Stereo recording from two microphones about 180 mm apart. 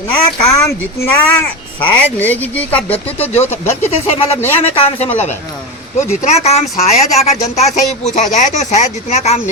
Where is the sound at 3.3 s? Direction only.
40° left (ahead or behind).